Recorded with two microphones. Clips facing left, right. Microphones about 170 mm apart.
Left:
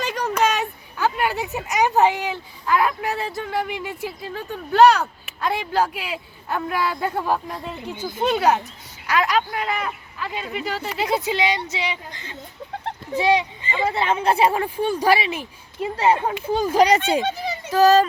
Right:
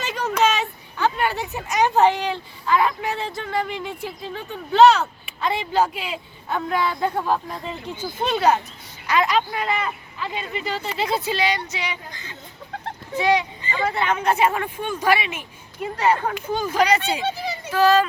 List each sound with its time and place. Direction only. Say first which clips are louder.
0.2 s a sound: right 1 dB; 10° left (ahead or behind)
0.9 s a man's voice: even; 5° left (ahead or behind); by 15.4 s 35° left (ahead or behind)
16.0 s speech: left 1 dB; 20° left (ahead or behind); by 18.0 s 40° left (ahead or behind)